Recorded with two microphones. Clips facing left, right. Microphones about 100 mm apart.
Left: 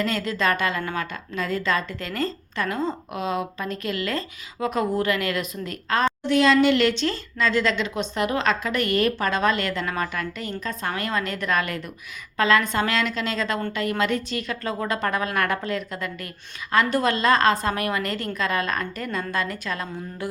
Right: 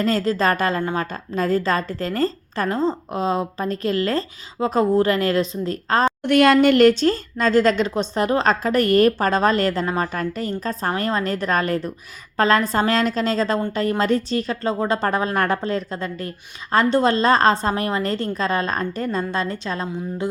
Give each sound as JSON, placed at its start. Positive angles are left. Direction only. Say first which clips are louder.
{"t": 0.0, "sound": "speech", "louder": "right 5 dB", "side_deg": -35}
{"t": 6.2, "sound": "a woman's voice", "louder": "right 4 dB", "side_deg": -55}